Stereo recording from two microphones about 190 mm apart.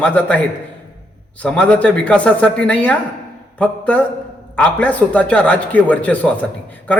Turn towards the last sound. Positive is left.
turn(degrees=10)  # may be behind; listen again after turning